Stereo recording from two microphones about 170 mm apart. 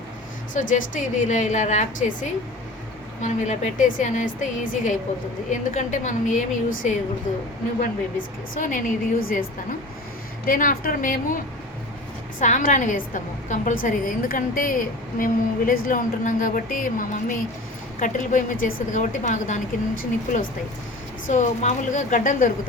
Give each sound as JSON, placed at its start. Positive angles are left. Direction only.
{"t": 0.5, "sound": "a woman's voice", "side_deg": 50}
{"t": 3.2, "sound": "a woman's voice", "side_deg": 45}
{"t": 8.5, "sound": "a woman's voice", "side_deg": 50}
{"t": 12.4, "sound": "a woman's voice", "side_deg": 50}